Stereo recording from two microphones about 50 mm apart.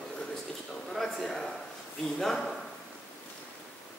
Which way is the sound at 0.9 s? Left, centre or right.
Centre.